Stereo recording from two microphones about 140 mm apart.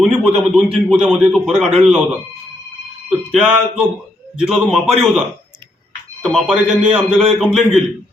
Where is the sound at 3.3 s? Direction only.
5° right (ahead or behind).